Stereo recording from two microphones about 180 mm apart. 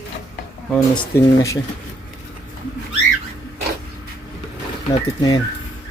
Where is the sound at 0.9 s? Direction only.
15° left (ahead or behind).